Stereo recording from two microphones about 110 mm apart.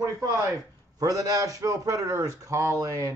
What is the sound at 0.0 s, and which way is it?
A man's voice, 30° right (ahead or behind).